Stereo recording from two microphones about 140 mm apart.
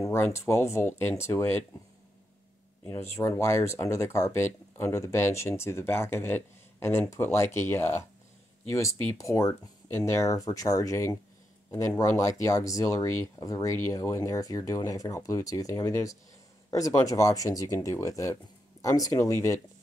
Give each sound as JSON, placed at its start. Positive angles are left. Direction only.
{"t": 0.0, "sound": "speech", "side_deg": 20}
{"t": 2.8, "sound": "speech", "side_deg": 15}